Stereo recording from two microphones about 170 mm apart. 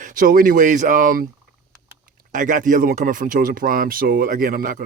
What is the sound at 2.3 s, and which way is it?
Speech, 50° right (ahead or behind).